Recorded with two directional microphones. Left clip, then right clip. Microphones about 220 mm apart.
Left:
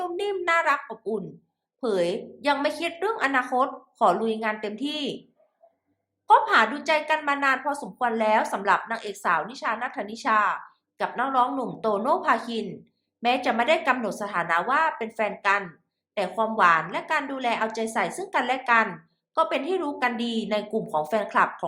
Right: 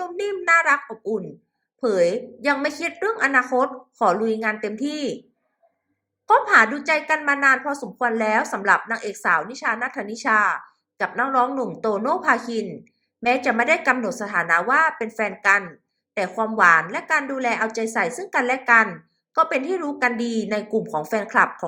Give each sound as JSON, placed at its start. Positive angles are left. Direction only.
{"t": 0.0, "sound": "a woman's voice", "side_deg": -10}
{"t": 6.2, "sound": "a woman's voice", "side_deg": -10}